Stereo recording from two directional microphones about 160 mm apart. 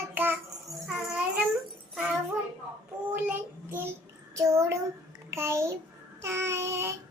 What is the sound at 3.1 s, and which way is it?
Child singing, 10° right (ahead or behind).